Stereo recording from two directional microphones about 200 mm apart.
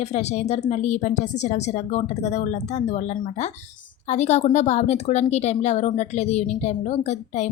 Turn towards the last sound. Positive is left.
turn(degrees=35)  # may be behind; listen again after turning